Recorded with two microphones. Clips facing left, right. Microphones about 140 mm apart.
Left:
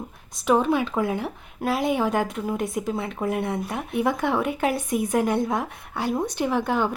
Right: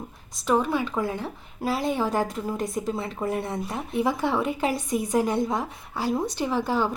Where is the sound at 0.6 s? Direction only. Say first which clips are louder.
Left 3 dB; 20° left (ahead or behind).